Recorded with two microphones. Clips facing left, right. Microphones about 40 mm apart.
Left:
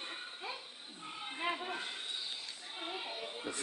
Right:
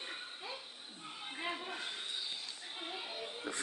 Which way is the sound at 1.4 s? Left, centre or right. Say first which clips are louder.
Left 3 dB; left.